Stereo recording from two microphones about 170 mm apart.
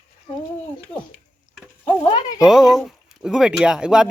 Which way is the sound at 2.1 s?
25° left (ahead or behind).